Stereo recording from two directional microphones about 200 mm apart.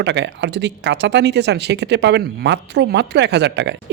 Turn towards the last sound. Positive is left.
turn(degrees=-60)  # may be behind; listen again after turning